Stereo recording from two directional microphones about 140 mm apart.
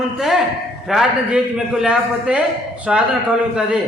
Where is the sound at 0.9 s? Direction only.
5° right (ahead or behind).